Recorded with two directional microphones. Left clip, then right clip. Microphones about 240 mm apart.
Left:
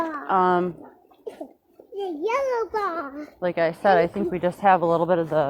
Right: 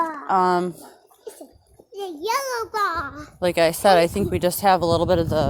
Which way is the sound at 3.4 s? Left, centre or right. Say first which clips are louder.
Right 4 dB; right.